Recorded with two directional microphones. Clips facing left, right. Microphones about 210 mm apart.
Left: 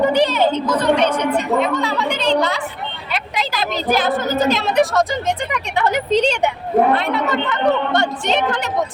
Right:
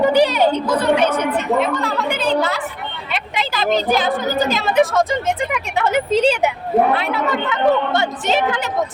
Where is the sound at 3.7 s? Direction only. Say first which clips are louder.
Even; centre (ahead or behind).